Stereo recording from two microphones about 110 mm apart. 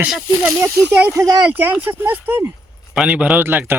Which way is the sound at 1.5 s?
15° right (ahead or behind).